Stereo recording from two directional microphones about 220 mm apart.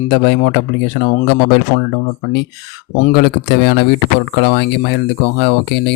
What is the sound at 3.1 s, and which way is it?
Speech, 45° left (ahead or behind).